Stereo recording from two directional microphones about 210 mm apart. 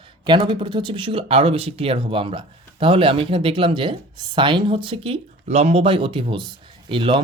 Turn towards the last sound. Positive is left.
turn(degrees=-25)  # may be behind; listen again after turning